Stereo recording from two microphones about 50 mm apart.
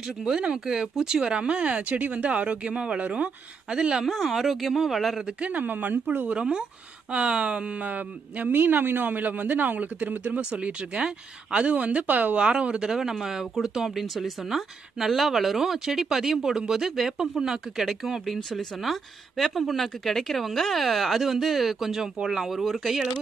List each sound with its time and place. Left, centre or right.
0.0 s speech: centre
4.0 s speech: centre
5.2 s speech: right
5.6 s speech: right
6.3 s speech: centre; by 12.4 s right
12.4 s speech: right; by 23.0 s centre